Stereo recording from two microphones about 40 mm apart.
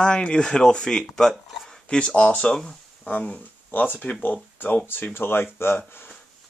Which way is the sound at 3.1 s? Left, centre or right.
Left.